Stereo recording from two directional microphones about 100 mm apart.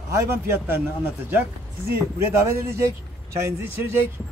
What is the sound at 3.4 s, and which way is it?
Speech, 25° right (ahead or behind).